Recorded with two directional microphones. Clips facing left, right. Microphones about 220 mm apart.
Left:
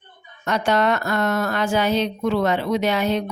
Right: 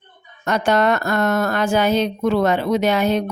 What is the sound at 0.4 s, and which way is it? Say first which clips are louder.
A woman's voice: right 2 dB; 45° right (ahead or behind).